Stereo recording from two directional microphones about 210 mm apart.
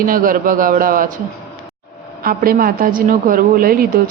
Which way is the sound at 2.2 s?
45° right (ahead or behind).